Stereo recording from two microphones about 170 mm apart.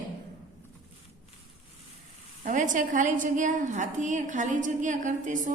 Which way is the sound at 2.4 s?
50° right (ahead or behind).